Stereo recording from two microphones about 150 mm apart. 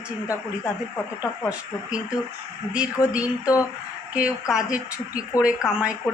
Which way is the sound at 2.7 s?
5° right (ahead or behind).